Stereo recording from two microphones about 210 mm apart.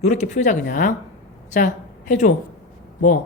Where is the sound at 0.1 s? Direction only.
35° left (ahead or behind).